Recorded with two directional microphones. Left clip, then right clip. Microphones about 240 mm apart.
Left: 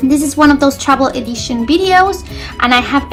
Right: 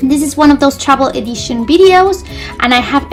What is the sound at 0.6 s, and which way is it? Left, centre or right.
A woman's voice, right.